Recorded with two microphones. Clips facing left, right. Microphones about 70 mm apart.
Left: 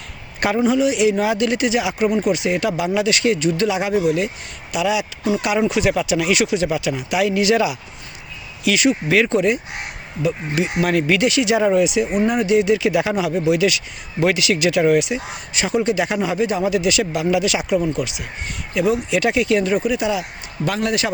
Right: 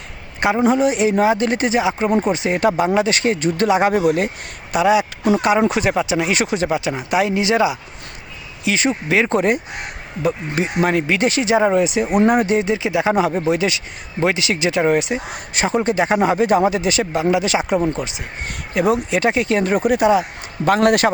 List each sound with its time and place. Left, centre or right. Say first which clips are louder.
0.3 s a sound: right 2 dB; right
0.6 s speech: even; right
2.0 s speech: right 1 dB; right
9.3 s speech: right 1 dB; right
13.1 s speech: right 1 dB; right
18.7 s speech: right 1 dB; right